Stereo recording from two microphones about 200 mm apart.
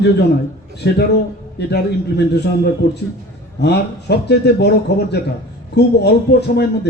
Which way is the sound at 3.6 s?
55° left (ahead or behind).